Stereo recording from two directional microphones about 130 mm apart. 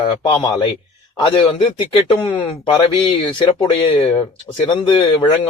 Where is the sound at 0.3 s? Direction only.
35° left (ahead or behind).